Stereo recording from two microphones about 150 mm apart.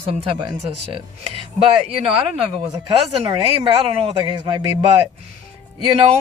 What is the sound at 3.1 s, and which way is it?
Speech, 30° right (ahead or behind).